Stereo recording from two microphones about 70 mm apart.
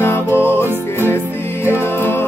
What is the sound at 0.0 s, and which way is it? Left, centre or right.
Music, left.